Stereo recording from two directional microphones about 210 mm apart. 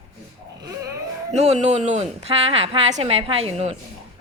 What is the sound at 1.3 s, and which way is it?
A woman's voice, 30° right (ahead or behind).